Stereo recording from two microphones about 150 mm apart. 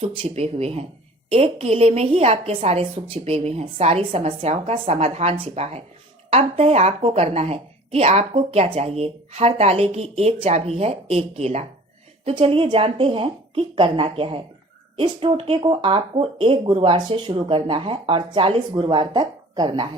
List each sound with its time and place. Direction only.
0.0 s a woman's voice: 40° right (ahead or behind)